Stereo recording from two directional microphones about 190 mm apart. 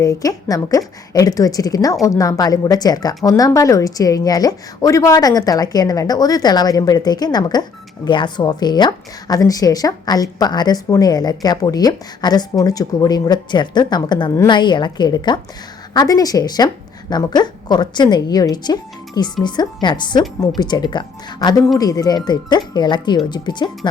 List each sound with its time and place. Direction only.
0.0 s a woman's voice: 20° left (ahead or behind)